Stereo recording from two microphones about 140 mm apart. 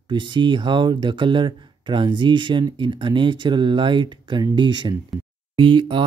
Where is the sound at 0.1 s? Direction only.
35° right (ahead or behind).